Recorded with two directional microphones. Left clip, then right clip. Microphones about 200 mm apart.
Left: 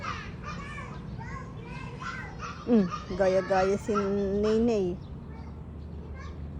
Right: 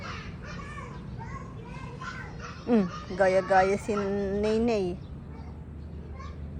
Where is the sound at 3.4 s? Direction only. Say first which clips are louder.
Right 3 dB; centre (ahead or behind).